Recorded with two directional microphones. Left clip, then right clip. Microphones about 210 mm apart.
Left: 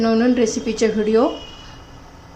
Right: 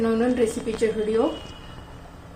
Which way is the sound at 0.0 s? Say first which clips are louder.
Left 5 dB; 25° left (ahead or behind).